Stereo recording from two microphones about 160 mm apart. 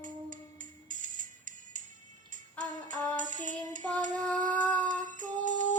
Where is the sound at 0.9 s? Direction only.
55° right (ahead or behind).